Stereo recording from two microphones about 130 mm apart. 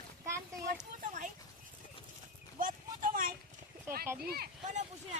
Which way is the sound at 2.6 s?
90° right.